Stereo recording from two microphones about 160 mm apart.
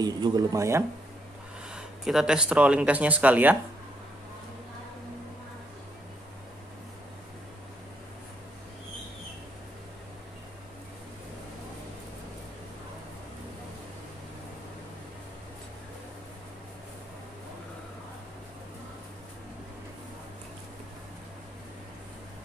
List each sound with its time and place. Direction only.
0.0 s speech: 25° right (ahead or behind)
1.7 s speech: 5° right (ahead or behind)